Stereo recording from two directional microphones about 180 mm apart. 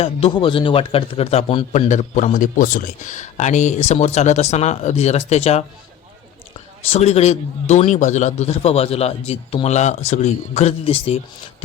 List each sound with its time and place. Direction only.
0.0 s a man's voice: 30° left (ahead or behind)
6.9 s a man's voice: 35° left (ahead or behind)